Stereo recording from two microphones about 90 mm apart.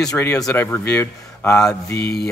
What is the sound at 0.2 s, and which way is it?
Speech, 15° left (ahead or behind).